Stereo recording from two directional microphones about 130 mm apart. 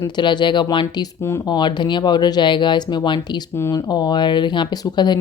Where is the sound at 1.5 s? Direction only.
35° left (ahead or behind).